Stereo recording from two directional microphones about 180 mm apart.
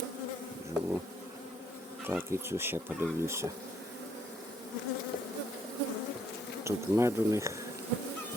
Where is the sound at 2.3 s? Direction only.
15° right (ahead or behind).